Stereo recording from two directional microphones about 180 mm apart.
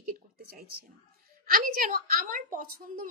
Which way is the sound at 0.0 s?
55° right (ahead or behind).